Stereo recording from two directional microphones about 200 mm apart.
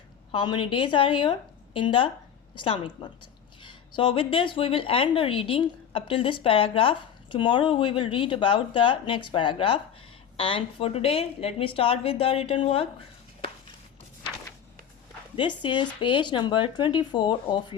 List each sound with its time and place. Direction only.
0.3 s a woman's voice: 25° left (ahead or behind)
15.4 s a woman's voice: 25° left (ahead or behind)